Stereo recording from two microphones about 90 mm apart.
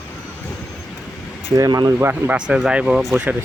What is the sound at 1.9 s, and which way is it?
Speech, 20° right (ahead or behind).